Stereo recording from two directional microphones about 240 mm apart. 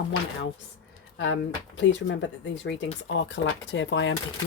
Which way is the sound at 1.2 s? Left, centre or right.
Left.